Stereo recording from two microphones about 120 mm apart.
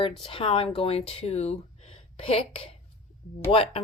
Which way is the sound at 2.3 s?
50° left (ahead or behind).